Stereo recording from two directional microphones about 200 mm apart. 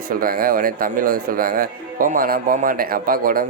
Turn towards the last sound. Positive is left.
turn(degrees=-45)  # may be behind; listen again after turning